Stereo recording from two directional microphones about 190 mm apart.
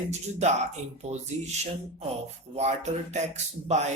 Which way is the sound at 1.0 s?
35° right (ahead or behind).